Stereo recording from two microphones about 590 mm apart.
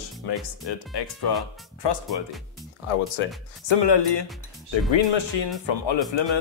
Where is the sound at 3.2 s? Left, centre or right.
Left.